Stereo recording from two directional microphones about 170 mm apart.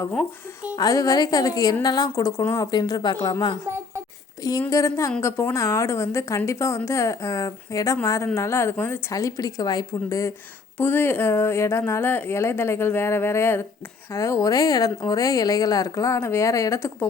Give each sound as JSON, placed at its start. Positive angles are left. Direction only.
{"t": 0.8, "sound": "a woman's voice", "side_deg": 20}
{"t": 4.6, "sound": "a woman's voice", "side_deg": 20}